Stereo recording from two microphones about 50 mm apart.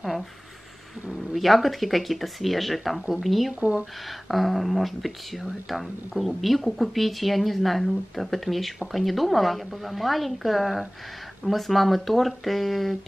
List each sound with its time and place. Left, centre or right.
1.3 s speech: centre